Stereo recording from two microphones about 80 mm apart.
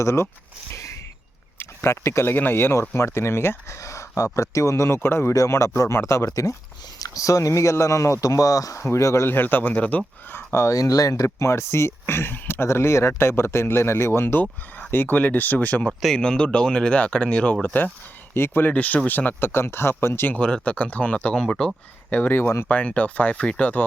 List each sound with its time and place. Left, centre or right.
0.0 s speech: left
0.7 s a sound: left
1.5 s speech: left
5.3 s speech: left; by 10.0 s centre
10.3 s speech: left; by 15.9 s centre
15.9 s speech: centre
16.1 s speech: centre
18.3 s speech: left
20.3 s speech: centre
22.1 s speech: left
22.7 s speech: centre